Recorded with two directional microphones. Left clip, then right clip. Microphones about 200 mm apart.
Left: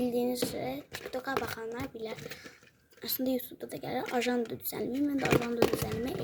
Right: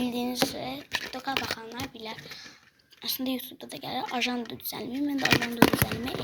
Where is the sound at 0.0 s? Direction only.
30° left (ahead or behind).